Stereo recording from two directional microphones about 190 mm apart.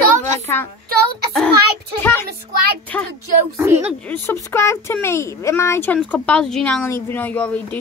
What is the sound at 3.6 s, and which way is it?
Speech, 15° right (ahead or behind).